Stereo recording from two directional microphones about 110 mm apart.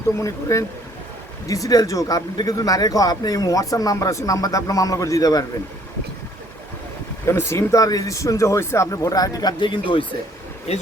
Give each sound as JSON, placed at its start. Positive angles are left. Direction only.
{"t": 0.2, "sound": "speech", "side_deg": 30}
{"t": 7.3, "sound": "speech", "side_deg": 25}
{"t": 10.7, "sound": "speech", "side_deg": 70}